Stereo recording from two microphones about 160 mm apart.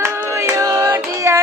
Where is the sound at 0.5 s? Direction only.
20° right (ahead or behind).